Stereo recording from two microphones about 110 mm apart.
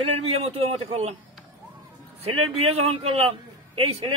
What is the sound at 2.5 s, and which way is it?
A man's voice, 65° right (ahead or behind).